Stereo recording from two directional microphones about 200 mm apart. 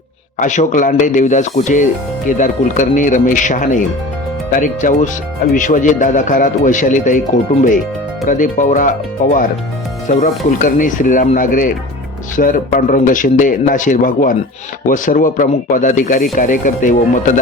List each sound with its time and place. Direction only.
0.3 s speech: 35° left (ahead or behind)
8.3 s speech: 40° left (ahead or behind)
10.1 s speech: 40° left (ahead or behind)